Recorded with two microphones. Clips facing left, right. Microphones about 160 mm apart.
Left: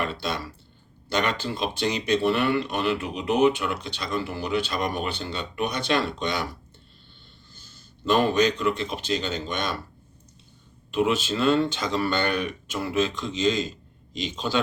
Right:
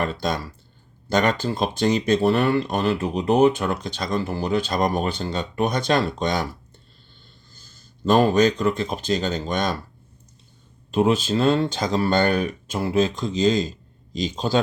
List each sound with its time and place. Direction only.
0.0 s speech: 45° right (ahead or behind)
8.0 s speech: 40° right (ahead or behind)
10.9 s speech: 35° right (ahead or behind)